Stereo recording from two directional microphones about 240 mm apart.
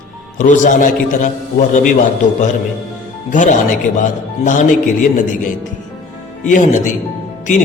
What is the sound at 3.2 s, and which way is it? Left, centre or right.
Speech, left.